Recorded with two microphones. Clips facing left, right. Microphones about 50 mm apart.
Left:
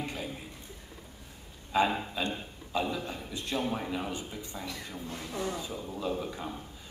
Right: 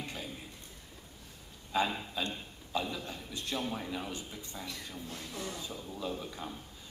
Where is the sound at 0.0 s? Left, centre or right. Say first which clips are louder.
Left 5 dB; centre.